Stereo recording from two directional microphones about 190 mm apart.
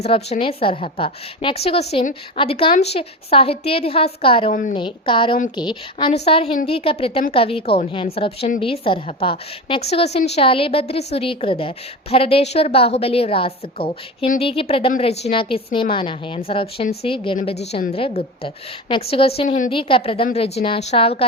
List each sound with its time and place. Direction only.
0.0 s a woman's voice: 30° left (ahead or behind)